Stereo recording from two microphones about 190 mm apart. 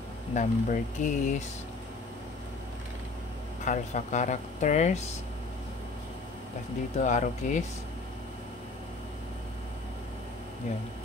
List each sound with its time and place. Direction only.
0.3 s speech: 40° left (ahead or behind)
3.6 s speech: 40° left (ahead or behind)
7.0 s speech: 40° left (ahead or behind)